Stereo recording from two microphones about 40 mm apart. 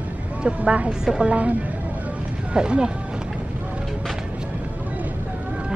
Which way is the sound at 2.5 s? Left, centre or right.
Right.